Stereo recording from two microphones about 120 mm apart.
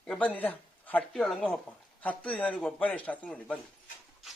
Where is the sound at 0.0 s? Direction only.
10° left (ahead or behind).